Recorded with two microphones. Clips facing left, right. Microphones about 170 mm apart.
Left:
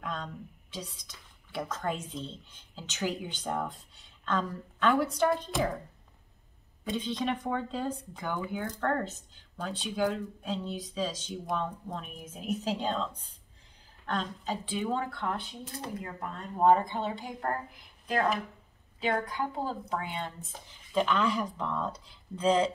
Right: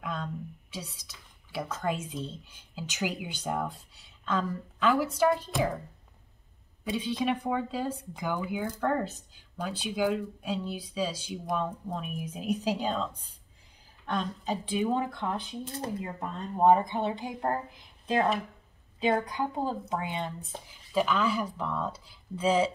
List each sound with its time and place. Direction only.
0.0 s speech: 5° right (ahead or behind)
6.8 s speech: 5° right (ahead or behind)